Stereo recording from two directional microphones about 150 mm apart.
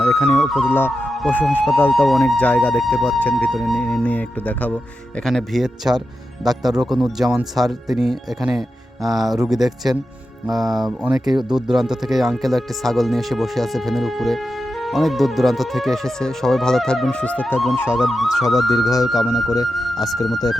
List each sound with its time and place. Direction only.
0.3 s speech: centre (ahead or behind)
1.3 s speech: 10° left (ahead or behind)